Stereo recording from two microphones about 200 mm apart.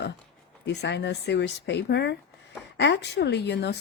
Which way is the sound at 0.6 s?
60° left (ahead or behind).